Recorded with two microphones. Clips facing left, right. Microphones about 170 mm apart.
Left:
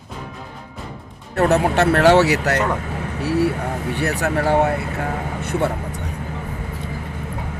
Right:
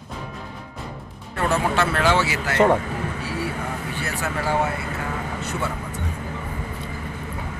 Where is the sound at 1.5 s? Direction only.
70° left (ahead or behind).